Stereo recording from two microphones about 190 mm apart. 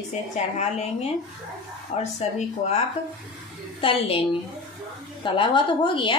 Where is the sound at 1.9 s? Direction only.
35° left (ahead or behind).